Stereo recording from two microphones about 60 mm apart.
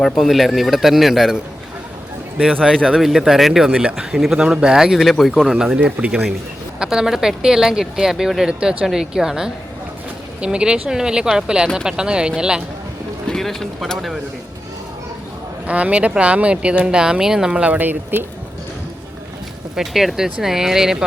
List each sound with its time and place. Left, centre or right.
0.0 s speech: centre
2.4 s speech: centre
3.0 s speech: centre
5.5 s speech: centre
5.8 s speech: right
6.7 s speech: centre
13.2 s speech: centre
15.6 s speech: right
17.7 s speech: right
19.7 s speech: centre